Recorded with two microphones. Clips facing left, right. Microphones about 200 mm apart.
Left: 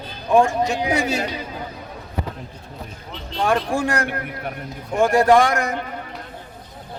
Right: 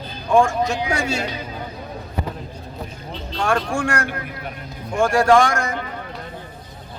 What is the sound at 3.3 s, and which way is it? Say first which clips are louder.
Speech: left 1 dB; 15° left (ahead or behind).